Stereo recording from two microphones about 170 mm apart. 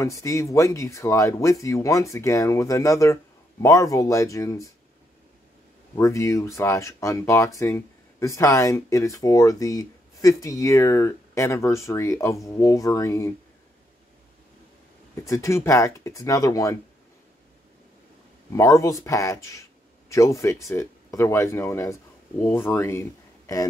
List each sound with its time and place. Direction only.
0.0 s speech: 20° left (ahead or behind)
5.9 s speech: 20° left (ahead or behind)
15.1 s speech: 20° left (ahead or behind)
18.5 s speech: 20° left (ahead or behind)